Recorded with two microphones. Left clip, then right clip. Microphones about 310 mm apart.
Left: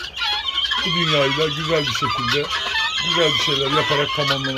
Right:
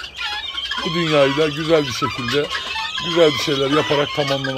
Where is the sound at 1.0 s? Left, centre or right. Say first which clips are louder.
Right 5 dB; centre.